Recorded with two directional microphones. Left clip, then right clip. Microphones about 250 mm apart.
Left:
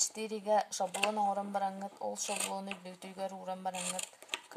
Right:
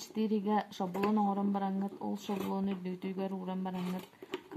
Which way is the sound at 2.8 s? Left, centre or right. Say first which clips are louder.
Right 3 dB; left.